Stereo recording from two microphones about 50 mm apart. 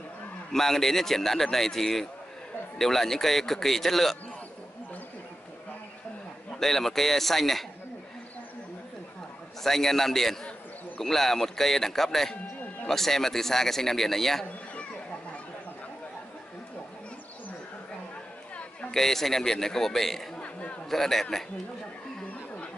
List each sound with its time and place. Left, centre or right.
0.5 s speech: centre
6.5 s speech: centre
9.6 s speech: centre
18.9 s speech: centre
20.3 s chatter: left
20.9 s speech: centre